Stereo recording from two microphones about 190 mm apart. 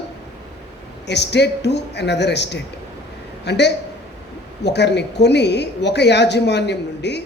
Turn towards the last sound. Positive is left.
turn(degrees=65)  # may be behind; listen again after turning